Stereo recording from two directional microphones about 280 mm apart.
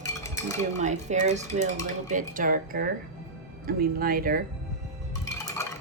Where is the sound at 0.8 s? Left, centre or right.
Right.